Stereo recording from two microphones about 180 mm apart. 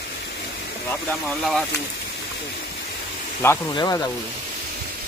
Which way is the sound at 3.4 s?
15° left (ahead or behind).